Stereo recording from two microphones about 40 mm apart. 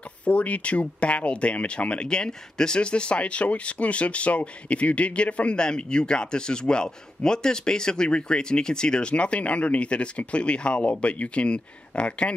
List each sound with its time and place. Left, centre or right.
0.2 s speech: left